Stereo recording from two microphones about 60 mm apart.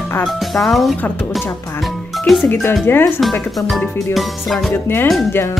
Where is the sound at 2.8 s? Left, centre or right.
Left.